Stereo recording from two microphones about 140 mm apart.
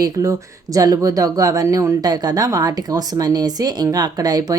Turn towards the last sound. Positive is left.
turn(degrees=-25)  # may be behind; listen again after turning